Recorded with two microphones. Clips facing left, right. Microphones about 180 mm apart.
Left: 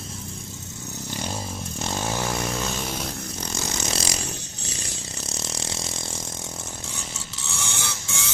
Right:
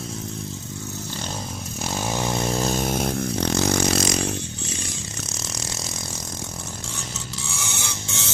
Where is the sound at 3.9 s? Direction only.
30° left (ahead or behind).